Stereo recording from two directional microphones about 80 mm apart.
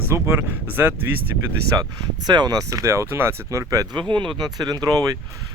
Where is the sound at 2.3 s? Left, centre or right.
Right.